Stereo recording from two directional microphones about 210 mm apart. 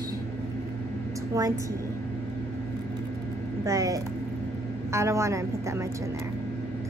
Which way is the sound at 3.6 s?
15° right (ahead or behind).